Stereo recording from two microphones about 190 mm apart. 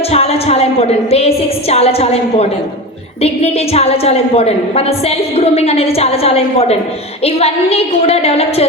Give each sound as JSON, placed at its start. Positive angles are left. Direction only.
{"t": 0.1, "sound": "a woman's voice", "side_deg": 35}